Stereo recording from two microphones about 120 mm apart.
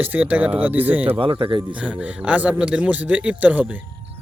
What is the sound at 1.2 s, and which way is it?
Speech, 45° right (ahead or behind).